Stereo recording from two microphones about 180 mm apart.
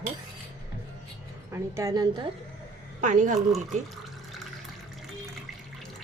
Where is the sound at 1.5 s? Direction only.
20° right (ahead or behind).